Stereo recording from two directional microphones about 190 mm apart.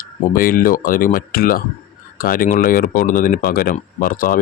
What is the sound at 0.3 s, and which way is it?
Speech, 50° left (ahead or behind).